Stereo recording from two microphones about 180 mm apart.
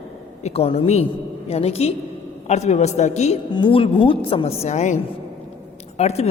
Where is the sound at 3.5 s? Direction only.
25° left (ahead or behind).